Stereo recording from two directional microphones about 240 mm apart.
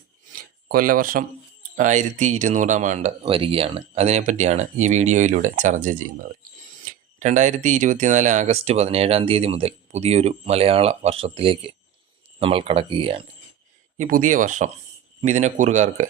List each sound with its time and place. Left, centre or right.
0.3 s a sound: right
1.7 s speech: right
14.0 s speech: right